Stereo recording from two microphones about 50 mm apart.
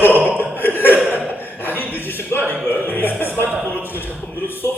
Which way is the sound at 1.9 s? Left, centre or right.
Left.